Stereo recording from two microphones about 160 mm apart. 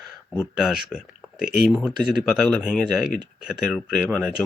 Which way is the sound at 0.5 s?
5° right (ahead or behind).